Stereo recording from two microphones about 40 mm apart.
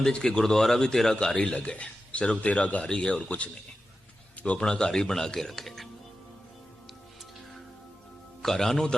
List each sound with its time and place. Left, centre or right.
0.1 s speech: left
1.1 s a man's voice: left
4.4 s a sound: left
4.6 s speech: centre
8.4 s speech: centre